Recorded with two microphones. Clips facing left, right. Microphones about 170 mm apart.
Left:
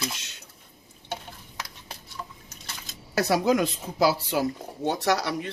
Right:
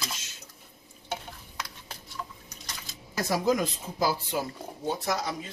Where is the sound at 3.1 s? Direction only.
75° left (ahead or behind).